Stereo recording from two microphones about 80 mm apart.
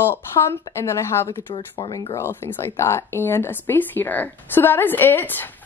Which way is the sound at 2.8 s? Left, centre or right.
Left.